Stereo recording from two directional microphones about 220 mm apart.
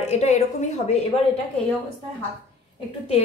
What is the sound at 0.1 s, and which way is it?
Speech, 30° left (ahead or behind).